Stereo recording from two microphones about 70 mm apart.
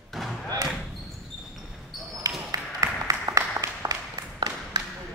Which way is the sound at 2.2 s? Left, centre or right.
Right.